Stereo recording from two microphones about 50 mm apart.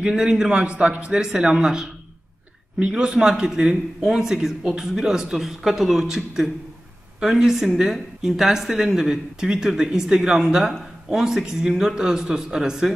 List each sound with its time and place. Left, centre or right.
0.0 s speech: centre